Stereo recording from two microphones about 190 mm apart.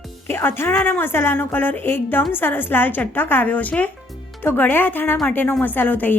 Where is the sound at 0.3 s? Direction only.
10° left (ahead or behind).